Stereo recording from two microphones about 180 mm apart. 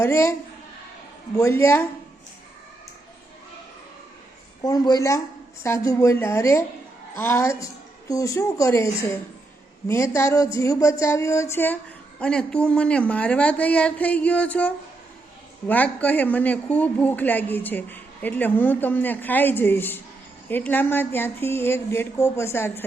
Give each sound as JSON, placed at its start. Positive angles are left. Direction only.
{"t": 0.0, "sound": "speech", "side_deg": 15}
{"t": 1.4, "sound": "speech", "side_deg": 15}
{"t": 4.6, "sound": "speech", "side_deg": 20}